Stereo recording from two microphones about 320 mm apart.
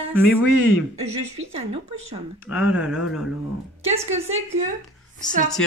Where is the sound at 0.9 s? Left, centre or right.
Centre.